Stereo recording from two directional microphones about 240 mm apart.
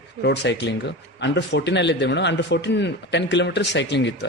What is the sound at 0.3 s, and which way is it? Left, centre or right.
A man's voice, left.